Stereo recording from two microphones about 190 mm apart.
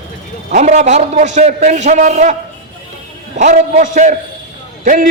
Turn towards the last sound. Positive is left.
turn(degrees=-45)  # may be behind; listen again after turning